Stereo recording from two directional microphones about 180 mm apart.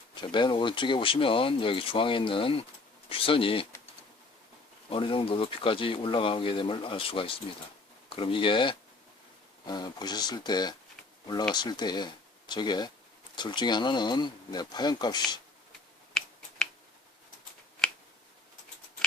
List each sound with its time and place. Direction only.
0.1 s speech: 25° left (ahead or behind)
4.9 s speech: 30° left (ahead or behind)
16.1 s finger snapping: 5° left (ahead or behind)